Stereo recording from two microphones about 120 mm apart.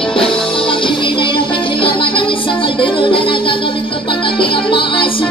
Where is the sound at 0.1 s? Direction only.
45° left (ahead or behind).